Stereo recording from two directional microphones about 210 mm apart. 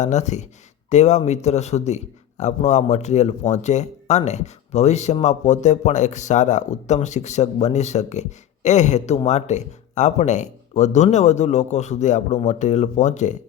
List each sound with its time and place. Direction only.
0.0 s speech: 35° left (ahead or behind)